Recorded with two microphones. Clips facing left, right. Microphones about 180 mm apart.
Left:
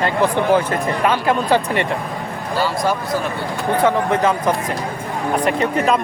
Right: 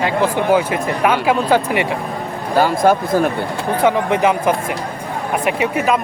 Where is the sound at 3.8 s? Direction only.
10° right (ahead or behind).